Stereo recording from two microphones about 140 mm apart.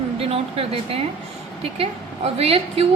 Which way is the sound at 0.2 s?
45° right (ahead or behind).